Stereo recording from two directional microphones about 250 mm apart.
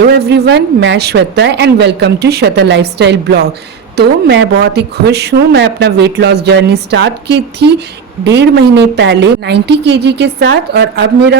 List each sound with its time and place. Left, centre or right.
0.1 s speech: right